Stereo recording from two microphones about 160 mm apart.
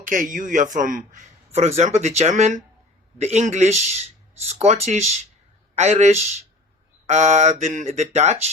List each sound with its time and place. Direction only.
0.1 s a man's voice: 55° right (ahead or behind)